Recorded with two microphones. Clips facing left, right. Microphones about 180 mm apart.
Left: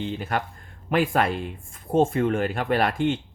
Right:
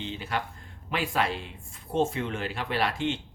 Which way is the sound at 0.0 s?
50° left (ahead or behind).